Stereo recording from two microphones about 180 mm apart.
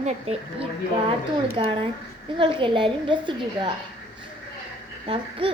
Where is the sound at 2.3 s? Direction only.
30° right (ahead or behind).